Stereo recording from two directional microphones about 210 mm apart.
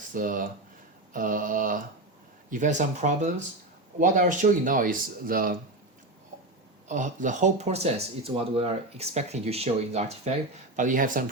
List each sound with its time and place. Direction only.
0.1 s speech: 40° right (ahead or behind)
6.8 s speech: 35° right (ahead or behind)